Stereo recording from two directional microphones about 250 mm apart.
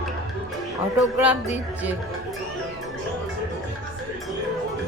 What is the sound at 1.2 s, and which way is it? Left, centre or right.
Speech, centre.